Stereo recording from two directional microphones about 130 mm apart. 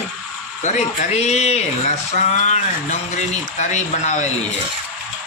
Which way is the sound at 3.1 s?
65° left (ahead or behind).